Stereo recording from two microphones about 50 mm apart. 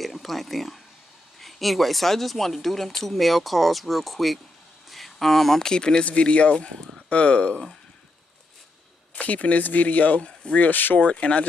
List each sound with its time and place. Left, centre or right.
0.0 s speech: centre; by 7.6 s left
9.1 s speech: left